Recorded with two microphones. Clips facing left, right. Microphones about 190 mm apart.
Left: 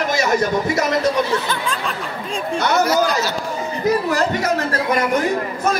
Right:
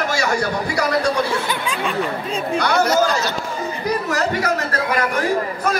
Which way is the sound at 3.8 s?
25° left (ahead or behind).